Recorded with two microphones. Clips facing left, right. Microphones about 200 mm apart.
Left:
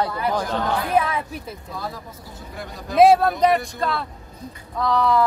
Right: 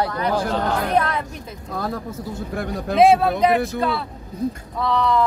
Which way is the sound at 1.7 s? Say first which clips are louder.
Right 9 dB; 55° right (ahead or behind).